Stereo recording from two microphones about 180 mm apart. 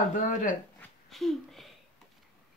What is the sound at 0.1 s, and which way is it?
Speech, 45° left (ahead or behind).